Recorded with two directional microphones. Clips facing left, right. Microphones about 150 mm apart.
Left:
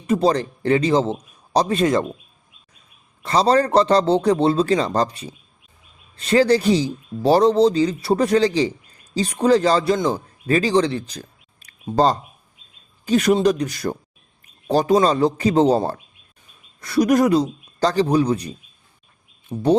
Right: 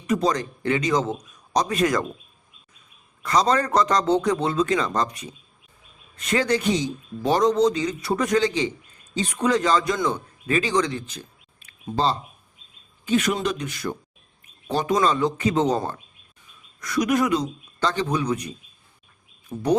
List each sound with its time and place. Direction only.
0.1 s a man's voice: 30° left (ahead or behind)
3.2 s a man's voice: 30° left (ahead or behind)
19.5 s speech: 15° left (ahead or behind)